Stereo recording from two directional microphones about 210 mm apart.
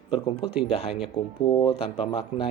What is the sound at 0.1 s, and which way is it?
Speech, 25° left (ahead or behind).